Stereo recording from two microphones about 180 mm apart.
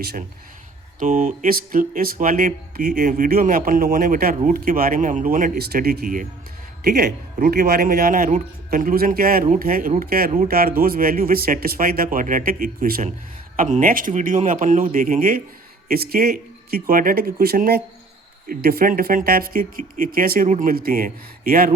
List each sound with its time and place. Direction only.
0.9 s speech: 50° right (ahead or behind)